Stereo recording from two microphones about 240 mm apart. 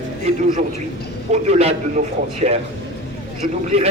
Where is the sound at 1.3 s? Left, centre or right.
Right.